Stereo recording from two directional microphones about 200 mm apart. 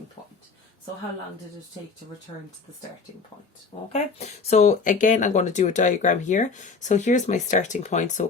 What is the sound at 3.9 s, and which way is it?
Speech, 35° left (ahead or behind).